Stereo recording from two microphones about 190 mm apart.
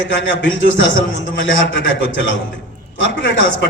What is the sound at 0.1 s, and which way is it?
A man's voice, 75° left (ahead or behind).